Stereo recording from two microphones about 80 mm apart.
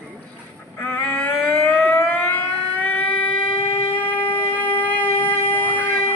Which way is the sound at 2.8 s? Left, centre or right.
Left.